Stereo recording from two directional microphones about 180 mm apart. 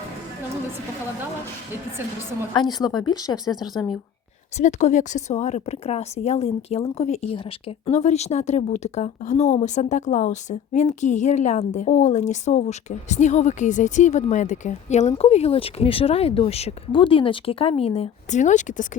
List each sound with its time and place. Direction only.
2.6 s speech: 20° left (ahead or behind)
4.5 s a woman's voice: 40° left (ahead or behind)